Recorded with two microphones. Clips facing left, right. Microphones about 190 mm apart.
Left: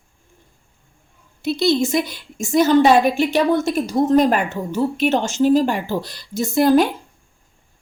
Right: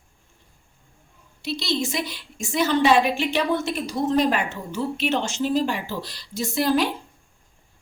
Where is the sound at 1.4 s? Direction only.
50° left (ahead or behind).